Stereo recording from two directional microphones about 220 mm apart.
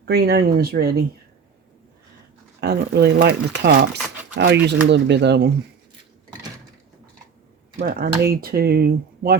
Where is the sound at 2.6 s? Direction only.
45° right (ahead or behind).